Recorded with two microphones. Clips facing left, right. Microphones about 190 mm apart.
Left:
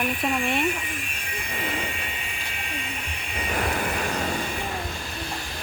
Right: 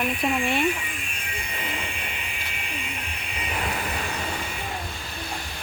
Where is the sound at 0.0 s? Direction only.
Centre (ahead or behind).